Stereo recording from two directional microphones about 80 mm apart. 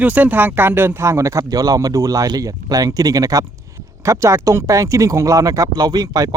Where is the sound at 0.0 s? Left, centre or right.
Right.